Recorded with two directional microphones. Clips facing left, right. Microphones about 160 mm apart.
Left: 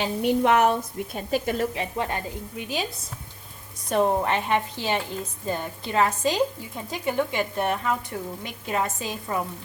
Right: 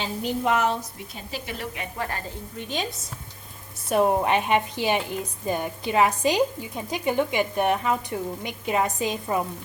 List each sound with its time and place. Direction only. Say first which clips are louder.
0.0 s a woman's voice: left 4 dB; 65° left (ahead or behind)
1.7 s speech: left 4 dB; 25° left (ahead or behind)
2.6 s a woman's voice: even; 10° left (ahead or behind)
3.8 s a woman's voice: right 1 dB; 10° right (ahead or behind)